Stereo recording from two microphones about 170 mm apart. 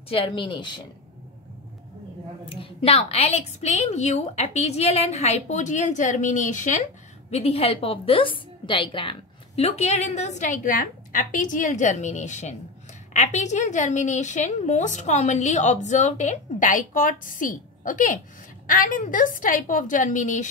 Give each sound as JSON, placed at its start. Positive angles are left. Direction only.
{"t": 0.1, "sound": "speech", "side_deg": 30}
{"t": 2.5, "sound": "a woman's voice", "side_deg": 35}